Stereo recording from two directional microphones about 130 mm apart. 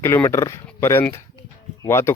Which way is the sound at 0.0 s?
20° left (ahead or behind).